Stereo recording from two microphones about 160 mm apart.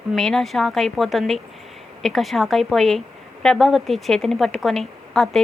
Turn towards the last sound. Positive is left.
turn(degrees=0)  # may be behind; listen again after turning